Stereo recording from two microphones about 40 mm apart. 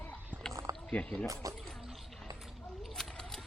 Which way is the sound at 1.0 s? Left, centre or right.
Left.